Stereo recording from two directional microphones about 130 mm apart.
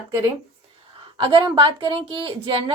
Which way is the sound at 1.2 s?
40° right (ahead or behind).